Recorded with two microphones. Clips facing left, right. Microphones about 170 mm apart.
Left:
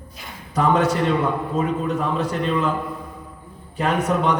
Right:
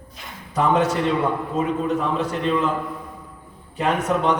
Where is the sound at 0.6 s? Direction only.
40° left (ahead or behind).